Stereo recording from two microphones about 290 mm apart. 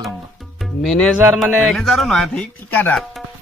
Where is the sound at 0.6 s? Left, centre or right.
Centre.